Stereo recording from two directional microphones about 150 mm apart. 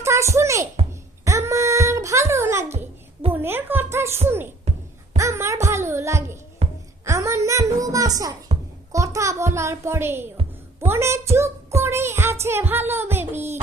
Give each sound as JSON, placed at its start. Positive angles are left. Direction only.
{"t": 0.0, "sound": "a child's voice", "side_deg": -20}
{"t": 1.2, "sound": "a sound", "side_deg": -20}
{"t": 4.3, "sound": "a child's voice", "side_deg": -15}